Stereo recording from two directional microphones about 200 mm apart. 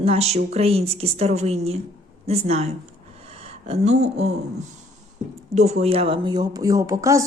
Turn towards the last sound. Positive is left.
turn(degrees=-15)  # may be behind; listen again after turning